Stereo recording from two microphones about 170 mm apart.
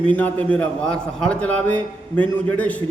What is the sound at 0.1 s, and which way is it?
A man's voice, 10° left (ahead or behind).